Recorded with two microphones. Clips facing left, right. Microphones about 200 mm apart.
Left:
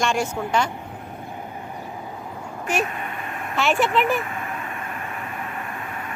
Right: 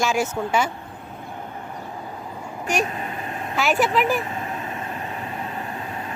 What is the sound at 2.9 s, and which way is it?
Vehicle, 30° right (ahead or behind).